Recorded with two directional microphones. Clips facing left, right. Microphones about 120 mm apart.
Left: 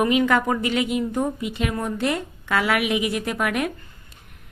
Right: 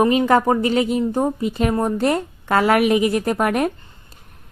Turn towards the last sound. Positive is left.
turn(degrees=-40)  # may be behind; listen again after turning